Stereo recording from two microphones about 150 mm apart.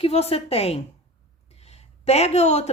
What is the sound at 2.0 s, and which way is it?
Speech, 45° left (ahead or behind).